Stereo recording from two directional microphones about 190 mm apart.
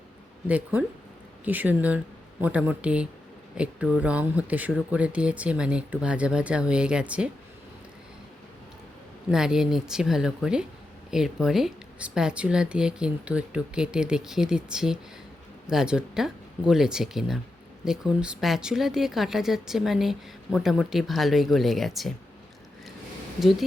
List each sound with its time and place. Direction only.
0.4 s speech: 5° right (ahead or behind)
9.3 s speech: 5° right (ahead or behind)
23.4 s speech: centre (ahead or behind)